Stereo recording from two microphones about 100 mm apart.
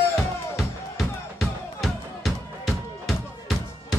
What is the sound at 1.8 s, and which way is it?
Music, centre (ahead or behind).